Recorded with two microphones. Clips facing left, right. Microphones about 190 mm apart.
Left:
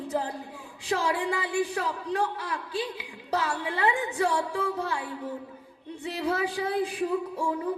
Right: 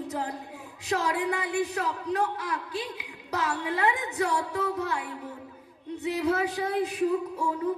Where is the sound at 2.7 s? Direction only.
30° left (ahead or behind).